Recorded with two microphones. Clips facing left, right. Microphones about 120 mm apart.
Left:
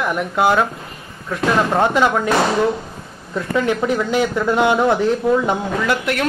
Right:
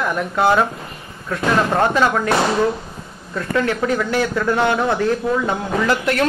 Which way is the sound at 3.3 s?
15° left (ahead or behind).